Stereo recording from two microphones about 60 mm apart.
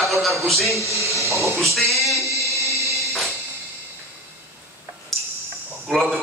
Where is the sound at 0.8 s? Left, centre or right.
Right.